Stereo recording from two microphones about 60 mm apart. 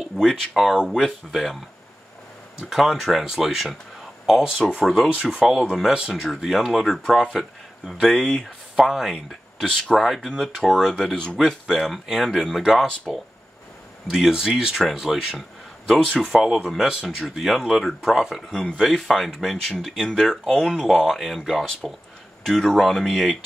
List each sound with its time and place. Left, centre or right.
0.2 s speech: centre
2.7 s speech: centre
4.8 s speech: centre
5.1 s speech: left
5.4 s speech: centre
8.7 s speech: centre
9.1 s speech: centre
11.6 s speech: centre
13.1 s speech: centre
14.1 s speech: centre